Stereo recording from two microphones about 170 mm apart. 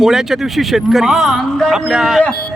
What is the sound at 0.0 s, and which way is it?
A man's voice, centre (ahead or behind).